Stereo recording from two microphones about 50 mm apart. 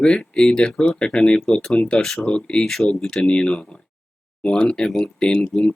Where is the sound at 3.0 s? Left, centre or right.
Centre.